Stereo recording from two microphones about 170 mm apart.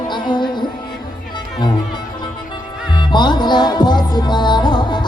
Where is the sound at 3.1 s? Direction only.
25° left (ahead or behind).